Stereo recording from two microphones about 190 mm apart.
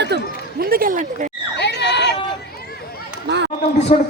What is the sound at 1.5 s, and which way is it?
Crowd, 65° left (ahead or behind).